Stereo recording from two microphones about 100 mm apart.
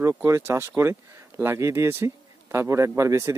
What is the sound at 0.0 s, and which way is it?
Speech, 25° right (ahead or behind).